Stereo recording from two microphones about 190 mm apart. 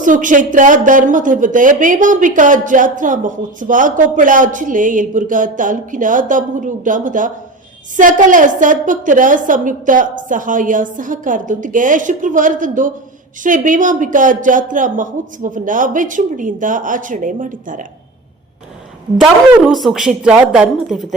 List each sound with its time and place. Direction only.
0.0 s a woman's voice: 45° right (ahead or behind)
19.1 s a woman's voice: centre (ahead or behind)